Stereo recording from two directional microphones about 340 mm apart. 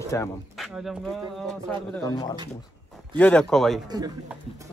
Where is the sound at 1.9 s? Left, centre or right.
Centre.